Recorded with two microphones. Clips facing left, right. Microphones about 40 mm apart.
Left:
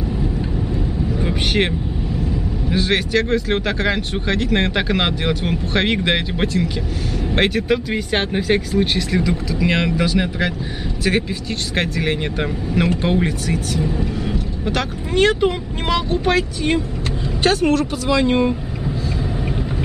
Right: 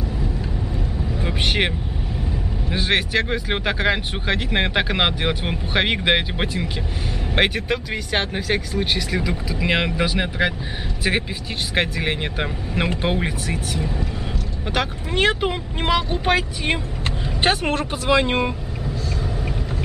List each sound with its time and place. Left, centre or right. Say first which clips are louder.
1.2 s vehicle: left 1 dB; centre
2.7 s speech: left 2 dB; centre
7.9 s speech: left 3 dB; centre
9.5 s speech: even; centre
11.7 s speech: left 1 dB; centre